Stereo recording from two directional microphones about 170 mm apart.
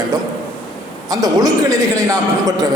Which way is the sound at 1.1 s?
20° right (ahead or behind).